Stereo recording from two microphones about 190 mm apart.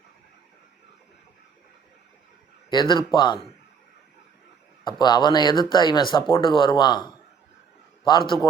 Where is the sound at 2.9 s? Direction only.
25° left (ahead or behind).